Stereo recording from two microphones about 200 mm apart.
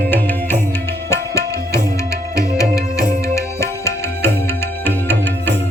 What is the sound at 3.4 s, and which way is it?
Music, 15° left (ahead or behind).